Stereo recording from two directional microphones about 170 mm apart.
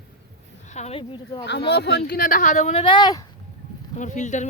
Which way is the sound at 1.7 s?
75° left (ahead or behind).